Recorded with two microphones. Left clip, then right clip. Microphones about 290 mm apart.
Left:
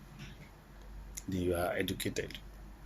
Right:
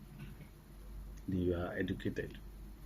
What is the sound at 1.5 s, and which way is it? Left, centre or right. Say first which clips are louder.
Speech: left 6 dB; left.